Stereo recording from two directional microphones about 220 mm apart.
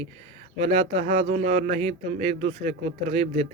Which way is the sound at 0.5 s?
30° right (ahead or behind).